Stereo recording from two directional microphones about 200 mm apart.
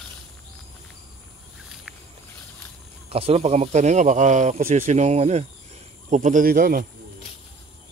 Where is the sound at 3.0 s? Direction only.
30° right (ahead or behind); by 6.8 s 45° right (ahead or behind).